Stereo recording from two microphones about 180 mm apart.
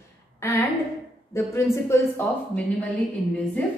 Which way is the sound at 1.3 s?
15° left (ahead or behind).